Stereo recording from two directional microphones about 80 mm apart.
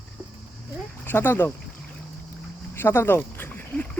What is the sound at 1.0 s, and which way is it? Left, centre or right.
Speech, left.